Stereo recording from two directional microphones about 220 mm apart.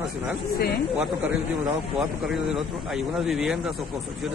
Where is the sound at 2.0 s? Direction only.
Centre (ahead or behind).